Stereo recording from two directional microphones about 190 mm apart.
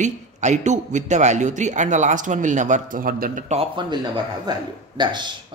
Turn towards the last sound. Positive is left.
turn(degrees=-25)  # may be behind; listen again after turning